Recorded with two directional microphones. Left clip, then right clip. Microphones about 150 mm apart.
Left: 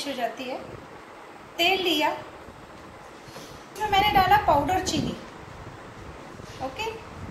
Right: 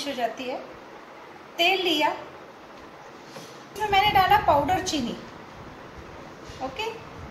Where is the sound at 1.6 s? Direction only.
Centre (ahead or behind).